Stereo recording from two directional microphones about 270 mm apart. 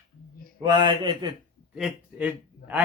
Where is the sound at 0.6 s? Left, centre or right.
Centre.